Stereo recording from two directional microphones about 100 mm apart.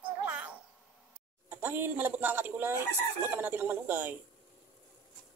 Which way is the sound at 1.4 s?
20° right (ahead or behind).